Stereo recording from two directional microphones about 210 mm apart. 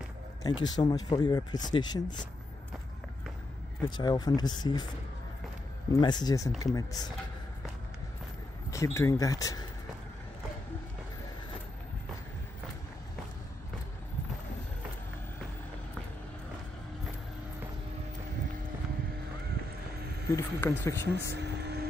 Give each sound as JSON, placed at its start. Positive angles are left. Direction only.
{"t": 0.4, "sound": "speech", "side_deg": 20}
{"t": 3.9, "sound": "speech", "side_deg": 20}
{"t": 5.9, "sound": "speech", "side_deg": 20}
{"t": 8.6, "sound": "speech", "side_deg": 15}
{"t": 20.2, "sound": "speech", "side_deg": 10}
{"t": 21.1, "sound": "vehicle", "side_deg": -50}